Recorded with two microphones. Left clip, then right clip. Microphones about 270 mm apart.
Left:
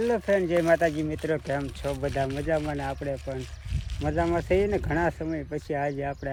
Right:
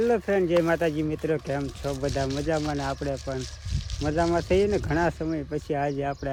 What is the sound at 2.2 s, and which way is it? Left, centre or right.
Speech, left.